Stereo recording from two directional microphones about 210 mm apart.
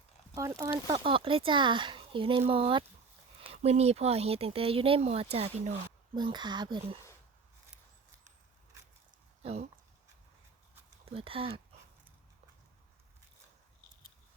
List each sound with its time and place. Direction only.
0.3 s speech: 15° right (ahead or behind)
9.4 s speech: 30° right (ahead or behind)
11.0 s speech: 25° right (ahead or behind)